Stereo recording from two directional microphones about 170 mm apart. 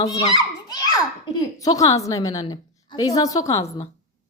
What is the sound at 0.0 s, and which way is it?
A child's voice, 20° left (ahead or behind).